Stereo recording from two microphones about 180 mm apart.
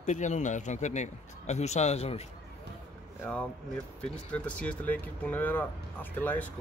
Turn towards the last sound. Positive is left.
turn(degrees=10)  # may be behind; listen again after turning